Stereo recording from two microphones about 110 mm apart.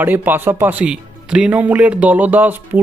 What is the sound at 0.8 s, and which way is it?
Speech, 10° right (ahead or behind).